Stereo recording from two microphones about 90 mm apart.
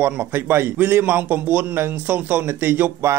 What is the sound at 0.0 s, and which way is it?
Speech, 25° right (ahead or behind).